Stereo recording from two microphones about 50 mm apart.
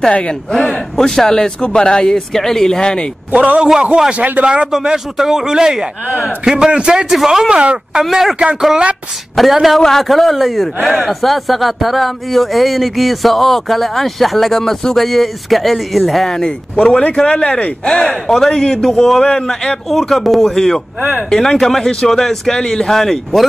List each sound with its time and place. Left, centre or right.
0.5 s speech: centre
3.6 s a man's voice: centre
4.7 s a man's voice: centre
7.1 s a man's voice: centre
7.4 s a man's voice: right
8.0 s a man's voice: centre
9.8 s a man's voice: centre
16.3 s speech: centre
17.8 s speech: centre
19.9 s a man's voice: centre
22.8 s speech: centre